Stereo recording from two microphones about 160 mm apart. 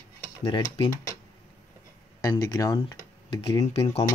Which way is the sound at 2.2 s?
20° left (ahead or behind).